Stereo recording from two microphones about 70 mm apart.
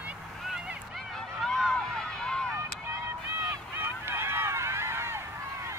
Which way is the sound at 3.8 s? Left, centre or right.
Right.